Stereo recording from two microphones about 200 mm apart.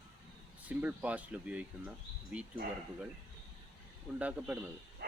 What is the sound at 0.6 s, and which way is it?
Speech, 5° right (ahead or behind).